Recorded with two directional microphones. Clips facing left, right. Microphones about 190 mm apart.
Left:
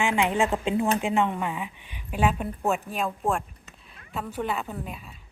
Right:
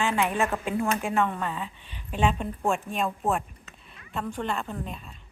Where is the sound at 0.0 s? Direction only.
15° left (ahead or behind).